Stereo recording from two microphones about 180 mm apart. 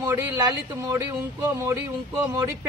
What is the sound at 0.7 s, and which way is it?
Speech, 20° right (ahead or behind).